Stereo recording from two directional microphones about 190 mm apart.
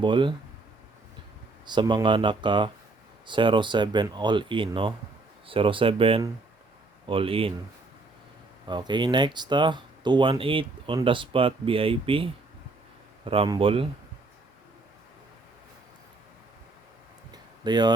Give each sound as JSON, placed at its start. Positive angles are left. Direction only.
{"t": 0.0, "sound": "speech", "side_deg": -25}
{"t": 1.6, "sound": "speech", "side_deg": -25}
{"t": 8.6, "sound": "speech", "side_deg": -25}
{"t": 17.3, "sound": "a sound", "side_deg": -20}